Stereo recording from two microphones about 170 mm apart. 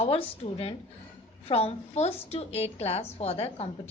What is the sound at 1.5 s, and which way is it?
A woman's voice, 35° left (ahead or behind).